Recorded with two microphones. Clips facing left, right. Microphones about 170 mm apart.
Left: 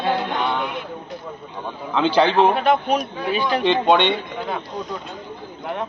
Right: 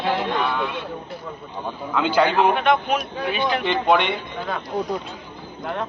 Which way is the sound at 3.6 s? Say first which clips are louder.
Left 4 dB; 25° left (ahead or behind).